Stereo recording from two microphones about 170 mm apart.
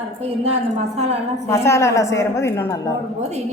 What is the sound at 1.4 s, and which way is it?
A woman's voice, 15° left (ahead or behind).